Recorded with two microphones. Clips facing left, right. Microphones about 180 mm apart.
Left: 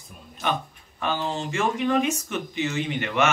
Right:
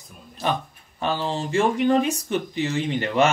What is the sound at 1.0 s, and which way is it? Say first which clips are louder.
Speech: right 2 dB; 35° right (ahead or behind).